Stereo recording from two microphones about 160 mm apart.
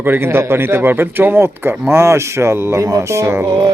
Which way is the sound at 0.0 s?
15° right (ahead or behind).